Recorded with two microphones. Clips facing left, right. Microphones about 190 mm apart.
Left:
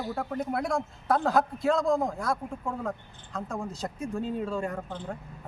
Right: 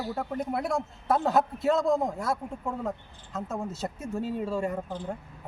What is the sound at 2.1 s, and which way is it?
Speech, 25° right (ahead or behind).